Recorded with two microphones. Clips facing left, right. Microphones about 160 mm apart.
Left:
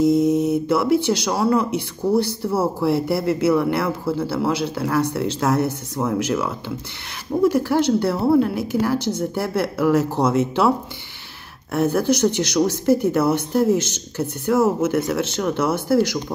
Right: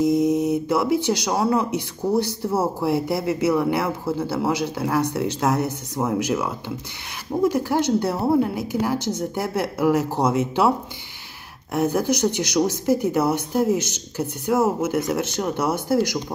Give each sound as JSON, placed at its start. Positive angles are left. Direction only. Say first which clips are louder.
{"t": 0.0, "sound": "speech", "louder": "left 2 dB", "side_deg": -15}
{"t": 11.7, "sound": "speech", "louder": "left 2 dB", "side_deg": -15}